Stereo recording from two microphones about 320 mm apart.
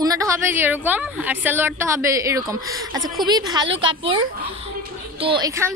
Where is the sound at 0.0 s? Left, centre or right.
Centre.